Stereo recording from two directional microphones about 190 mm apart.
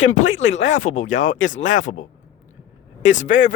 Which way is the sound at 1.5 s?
90° left.